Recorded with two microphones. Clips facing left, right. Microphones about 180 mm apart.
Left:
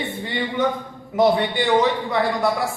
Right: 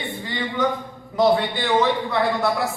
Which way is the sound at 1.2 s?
15° left (ahead or behind).